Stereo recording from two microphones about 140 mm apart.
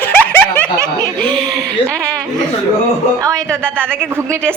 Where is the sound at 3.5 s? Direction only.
15° right (ahead or behind).